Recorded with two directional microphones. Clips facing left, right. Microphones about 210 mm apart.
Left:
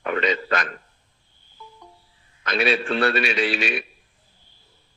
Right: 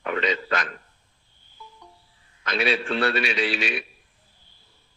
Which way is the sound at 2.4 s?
50° left (ahead or behind).